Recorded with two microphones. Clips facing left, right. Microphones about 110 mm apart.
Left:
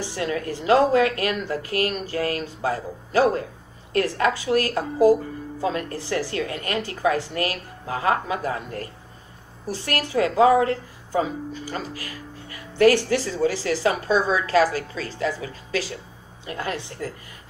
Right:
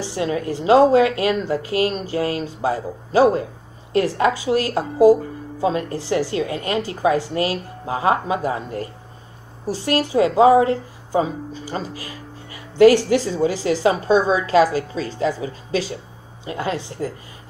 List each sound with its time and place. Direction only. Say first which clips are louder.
0.0 s a woman's voice: right 4 dB; 20° right (ahead or behind)